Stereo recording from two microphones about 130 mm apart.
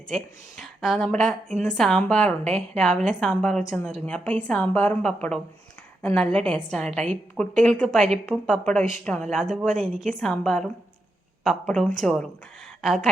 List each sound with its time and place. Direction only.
0.6 s a woman's voice: centre (ahead or behind)